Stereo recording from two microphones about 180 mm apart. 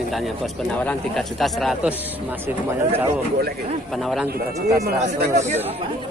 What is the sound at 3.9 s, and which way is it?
Speech, centre (ahead or behind).